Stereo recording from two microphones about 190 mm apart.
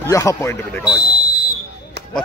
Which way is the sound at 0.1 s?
15° left (ahead or behind).